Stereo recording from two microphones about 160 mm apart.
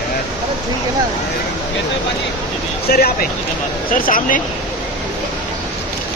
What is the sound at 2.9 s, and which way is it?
Speech, 65° left (ahead or behind).